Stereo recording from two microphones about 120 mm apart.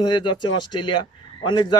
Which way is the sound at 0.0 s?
40° left (ahead or behind).